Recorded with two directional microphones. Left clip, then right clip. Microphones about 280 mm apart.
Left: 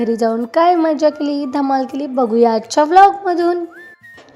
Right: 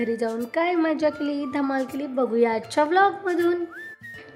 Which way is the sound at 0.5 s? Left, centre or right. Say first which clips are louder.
Left 10 dB; centre.